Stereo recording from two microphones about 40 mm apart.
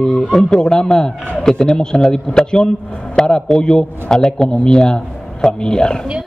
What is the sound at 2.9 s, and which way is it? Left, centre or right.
Speech, left.